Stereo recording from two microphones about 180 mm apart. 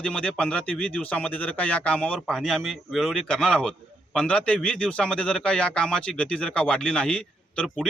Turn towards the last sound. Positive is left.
turn(degrees=5)  # may be behind; listen again after turning